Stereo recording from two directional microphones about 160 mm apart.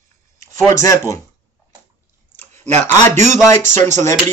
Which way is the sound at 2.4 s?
15° left (ahead or behind).